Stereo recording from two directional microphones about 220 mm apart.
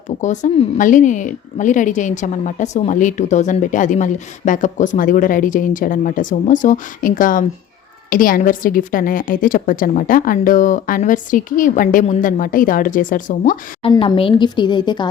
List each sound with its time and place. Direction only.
0.2 s a woman's voice: 35° left (ahead or behind)
13.9 s a woman's voice: 20° left (ahead or behind)